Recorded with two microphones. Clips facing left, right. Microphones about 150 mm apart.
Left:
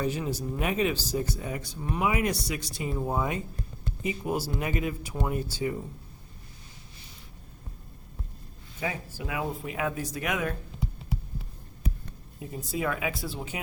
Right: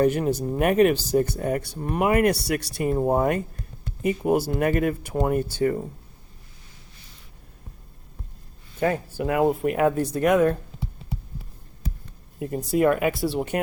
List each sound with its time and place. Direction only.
0.0 s speech: 60° right (ahead or behind)
8.8 s speech: 55° right (ahead or behind)
12.4 s speech: 60° right (ahead or behind)